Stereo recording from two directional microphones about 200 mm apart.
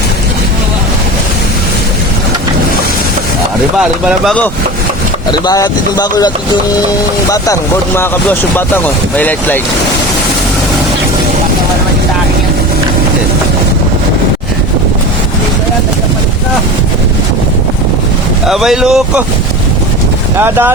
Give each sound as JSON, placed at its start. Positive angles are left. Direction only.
{"t": 3.8, "sound": "speech", "side_deg": 0}
{"t": 5.3, "sound": "speech", "side_deg": 20}
{"t": 18.4, "sound": "speech", "side_deg": 0}
{"t": 20.4, "sound": "speech", "side_deg": -10}